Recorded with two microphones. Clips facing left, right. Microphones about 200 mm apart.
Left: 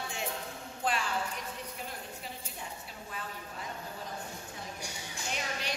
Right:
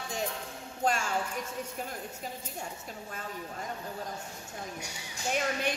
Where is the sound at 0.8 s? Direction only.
45° right (ahead or behind).